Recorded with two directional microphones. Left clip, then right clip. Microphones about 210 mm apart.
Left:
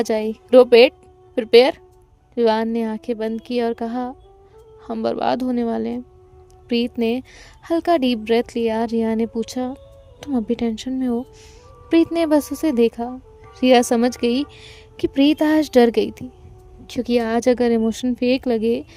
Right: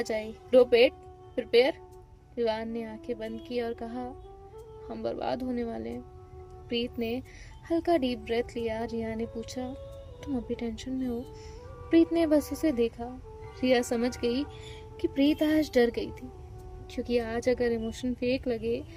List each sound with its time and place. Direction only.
0.0 s speech: 50° left (ahead or behind)